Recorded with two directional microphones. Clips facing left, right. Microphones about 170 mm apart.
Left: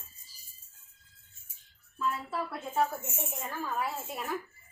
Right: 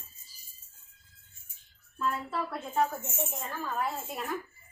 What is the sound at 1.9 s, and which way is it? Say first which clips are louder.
A woman's voice: right 1 dB; 5° left (ahead or behind).